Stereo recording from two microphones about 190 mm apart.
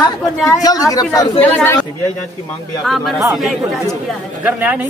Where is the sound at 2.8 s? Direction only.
Centre (ahead or behind).